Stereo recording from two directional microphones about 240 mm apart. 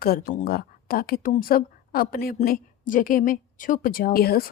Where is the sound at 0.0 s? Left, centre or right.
Left.